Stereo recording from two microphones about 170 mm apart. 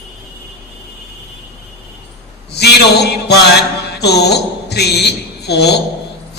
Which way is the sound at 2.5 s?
70° left (ahead or behind).